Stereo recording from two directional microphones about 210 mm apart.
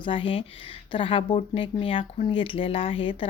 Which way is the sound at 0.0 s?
25° left (ahead or behind).